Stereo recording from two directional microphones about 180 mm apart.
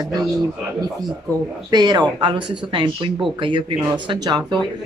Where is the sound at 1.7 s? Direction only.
25° right (ahead or behind).